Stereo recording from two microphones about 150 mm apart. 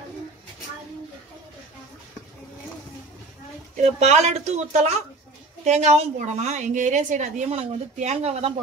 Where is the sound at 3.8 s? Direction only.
45° right (ahead or behind).